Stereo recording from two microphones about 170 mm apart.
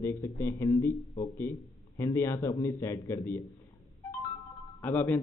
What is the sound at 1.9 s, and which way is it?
A man's voice, 15° left (ahead or behind).